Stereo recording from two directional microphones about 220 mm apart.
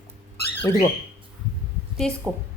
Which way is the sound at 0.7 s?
15° left (ahead or behind).